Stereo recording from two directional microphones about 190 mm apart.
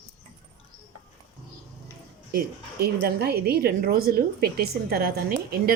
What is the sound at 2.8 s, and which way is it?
A woman's voice, 55° right (ahead or behind).